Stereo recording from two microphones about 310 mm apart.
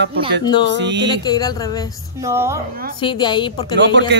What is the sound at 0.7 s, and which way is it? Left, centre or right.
Speech, right.